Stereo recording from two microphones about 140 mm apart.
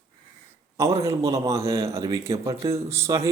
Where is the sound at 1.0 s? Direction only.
20° right (ahead or behind).